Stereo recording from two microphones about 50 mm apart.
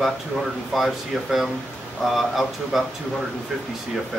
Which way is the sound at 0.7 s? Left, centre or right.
Centre.